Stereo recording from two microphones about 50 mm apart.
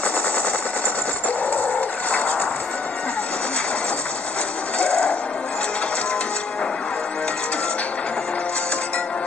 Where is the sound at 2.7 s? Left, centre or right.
Left.